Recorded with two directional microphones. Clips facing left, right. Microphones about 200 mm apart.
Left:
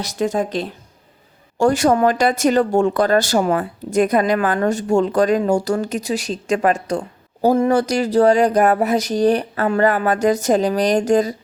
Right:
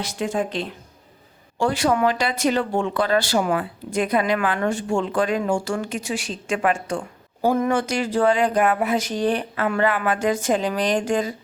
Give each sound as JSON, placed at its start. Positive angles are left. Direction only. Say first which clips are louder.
{"t": 0.0, "sound": "speech", "louder": "left 4 dB", "side_deg": 40}